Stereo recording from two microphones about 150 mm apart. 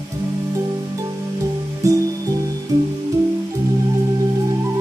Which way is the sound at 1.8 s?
20° right (ahead or behind).